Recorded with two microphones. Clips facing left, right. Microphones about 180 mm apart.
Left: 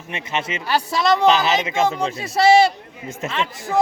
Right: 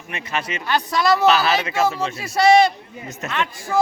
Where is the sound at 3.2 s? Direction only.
30° left (ahead or behind).